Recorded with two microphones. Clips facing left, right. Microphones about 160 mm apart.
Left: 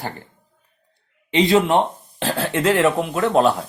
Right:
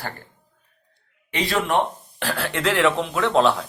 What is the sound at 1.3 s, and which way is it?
Speech, 20° left (ahead or behind).